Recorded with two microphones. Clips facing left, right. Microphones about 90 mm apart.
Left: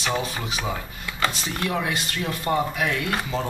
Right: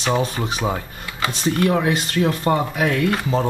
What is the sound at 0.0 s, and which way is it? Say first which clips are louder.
Speech: right 6 dB; 30° right (ahead or behind).